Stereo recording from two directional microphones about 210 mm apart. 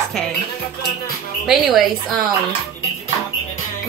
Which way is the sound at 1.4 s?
Centre (ahead or behind).